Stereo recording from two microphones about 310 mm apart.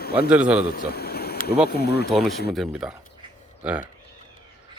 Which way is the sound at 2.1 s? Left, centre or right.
Centre.